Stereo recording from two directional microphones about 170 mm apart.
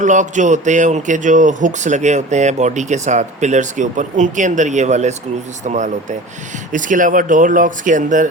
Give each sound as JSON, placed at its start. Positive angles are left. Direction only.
{"t": 0.0, "sound": "speech", "side_deg": -45}